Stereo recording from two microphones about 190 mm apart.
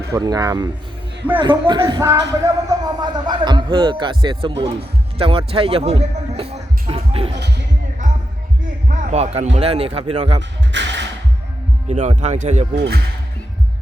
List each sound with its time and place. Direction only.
0.1 s speech: 20° right (ahead or behind)
7.3 s speech: 65° right (ahead or behind)
8.9 s a sound: 40° right (ahead or behind)
9.6 s speech: 30° right (ahead or behind)
10.7 s music: 70° right (ahead or behind)
11.9 s speech: 35° right (ahead or behind)
12.7 s speech: 60° right (ahead or behind)